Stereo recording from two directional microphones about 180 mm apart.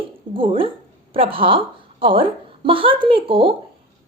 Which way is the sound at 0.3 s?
30° right (ahead or behind).